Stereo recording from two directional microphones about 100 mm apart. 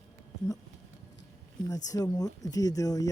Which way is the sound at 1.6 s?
35° left (ahead or behind).